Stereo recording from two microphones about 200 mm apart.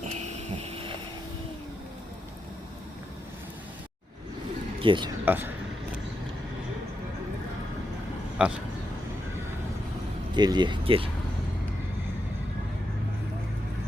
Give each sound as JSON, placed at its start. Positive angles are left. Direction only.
{"t": 0.6, "sound": "vehicle", "side_deg": -30}
{"t": 4.8, "sound": "speech", "side_deg": -25}
{"t": 5.2, "sound": "speech", "side_deg": -10}
{"t": 8.4, "sound": "speech", "side_deg": -5}
{"t": 10.3, "sound": "speech", "side_deg": -20}